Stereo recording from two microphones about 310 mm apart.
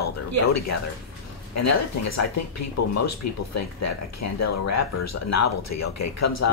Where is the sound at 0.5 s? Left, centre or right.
Left.